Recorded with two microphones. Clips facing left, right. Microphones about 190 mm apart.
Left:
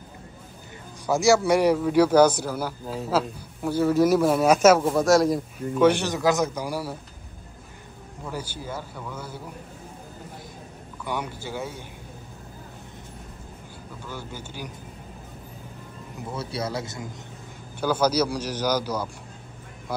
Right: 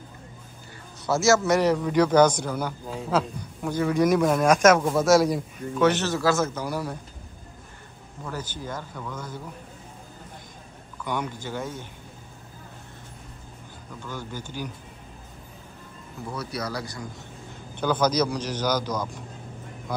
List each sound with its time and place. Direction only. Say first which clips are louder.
1.0 s a man's voice: left 1 dB; 15° left (ahead or behind)
8.3 s a man's voice: even; 10° left (ahead or behind)
11.1 s a man's voice: right 1 dB; 10° left (ahead or behind)
14.0 s a man's voice: right 2 dB; 10° left (ahead or behind)
16.3 s speech: left 1 dB; 25° left (ahead or behind)
17.7 s a man's voice: left 1 dB; 10° left (ahead or behind)